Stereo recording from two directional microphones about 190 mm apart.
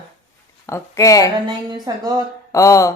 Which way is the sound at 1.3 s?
25° right (ahead or behind).